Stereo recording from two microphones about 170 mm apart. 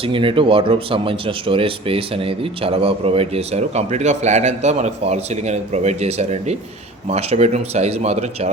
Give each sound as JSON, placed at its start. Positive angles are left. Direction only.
{"t": 0.0, "sound": "speech", "side_deg": -30}